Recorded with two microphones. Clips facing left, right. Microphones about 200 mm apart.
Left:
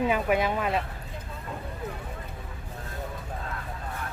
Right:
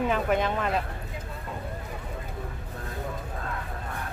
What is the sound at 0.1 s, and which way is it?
Speech, 10° left (ahead or behind).